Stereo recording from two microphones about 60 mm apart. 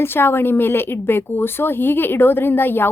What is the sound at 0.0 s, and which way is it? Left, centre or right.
Speech, left.